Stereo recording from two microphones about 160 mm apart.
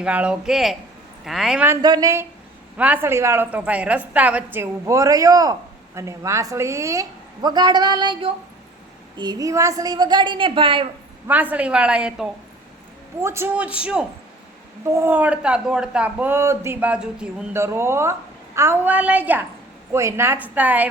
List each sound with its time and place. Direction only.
0.0 s speech: 5° right (ahead or behind)
1.6 s a woman's voice: 20° right (ahead or behind)
2.7 s a woman's voice: 10° right (ahead or behind); by 10.8 s 30° right (ahead or behind)
11.3 s a woman's voice: 10° right (ahead or behind)